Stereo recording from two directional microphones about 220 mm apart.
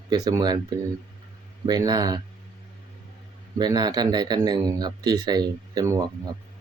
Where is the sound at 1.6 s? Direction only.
20° right (ahead or behind).